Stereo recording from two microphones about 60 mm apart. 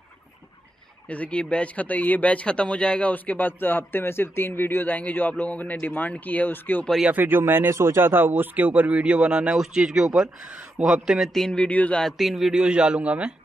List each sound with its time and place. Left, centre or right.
1.0 s speech: left
7.1 s a man's voice: right; by 11.2 s centre
11.5 s speech: left
12.0 s a man's voice: centre
12.5 s a man's voice: centre